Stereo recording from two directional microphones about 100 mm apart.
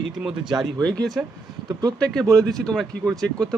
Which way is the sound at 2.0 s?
5° left (ahead or behind).